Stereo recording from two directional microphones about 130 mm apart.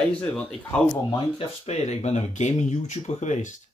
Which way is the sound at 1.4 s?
55° left (ahead or behind).